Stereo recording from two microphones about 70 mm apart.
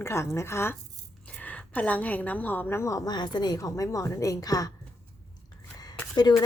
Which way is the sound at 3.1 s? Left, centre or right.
Left.